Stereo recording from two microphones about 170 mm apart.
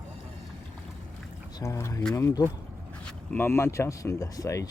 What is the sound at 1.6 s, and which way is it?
Speech, 20° left (ahead or behind).